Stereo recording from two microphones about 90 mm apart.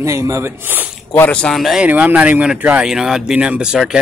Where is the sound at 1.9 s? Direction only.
20° right (ahead or behind).